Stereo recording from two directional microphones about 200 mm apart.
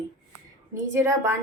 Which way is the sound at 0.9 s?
15° right (ahead or behind).